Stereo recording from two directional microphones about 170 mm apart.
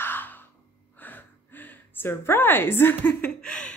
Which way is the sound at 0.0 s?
10° left (ahead or behind).